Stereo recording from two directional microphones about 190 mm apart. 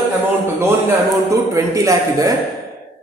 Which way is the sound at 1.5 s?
15° right (ahead or behind).